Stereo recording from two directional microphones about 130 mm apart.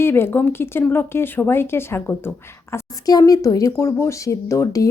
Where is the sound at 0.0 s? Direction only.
20° left (ahead or behind).